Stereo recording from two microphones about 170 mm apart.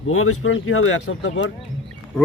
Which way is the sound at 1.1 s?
90° left.